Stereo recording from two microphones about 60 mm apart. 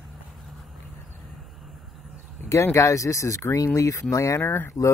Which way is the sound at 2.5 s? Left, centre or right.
Left.